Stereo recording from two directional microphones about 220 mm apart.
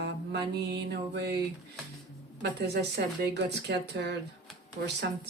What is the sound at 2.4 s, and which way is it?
Speech, 50° right (ahead or behind).